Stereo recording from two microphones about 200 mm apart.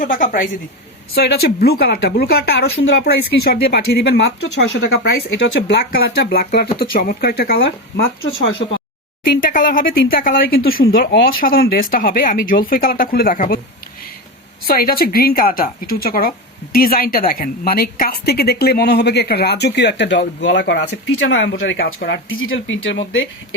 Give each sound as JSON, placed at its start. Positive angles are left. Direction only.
{"t": 0.0, "sound": "a woman's voice", "side_deg": 40}
{"t": 9.4, "sound": "a woman's voice", "side_deg": 45}
{"t": 14.6, "sound": "a woman's voice", "side_deg": 50}